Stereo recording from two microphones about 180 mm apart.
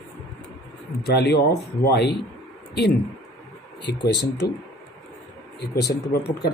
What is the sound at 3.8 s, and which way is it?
Speech, 70° left (ahead or behind).